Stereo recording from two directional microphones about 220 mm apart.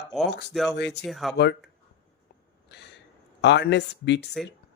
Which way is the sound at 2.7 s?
50° left (ahead or behind).